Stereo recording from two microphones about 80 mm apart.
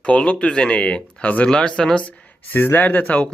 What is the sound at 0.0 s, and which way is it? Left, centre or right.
Speech, centre.